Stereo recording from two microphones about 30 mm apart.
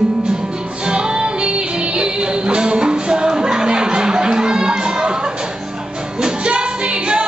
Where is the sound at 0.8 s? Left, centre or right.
Right.